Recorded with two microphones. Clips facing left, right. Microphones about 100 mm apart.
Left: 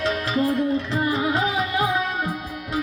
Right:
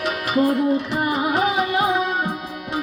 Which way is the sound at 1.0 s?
15° right (ahead or behind).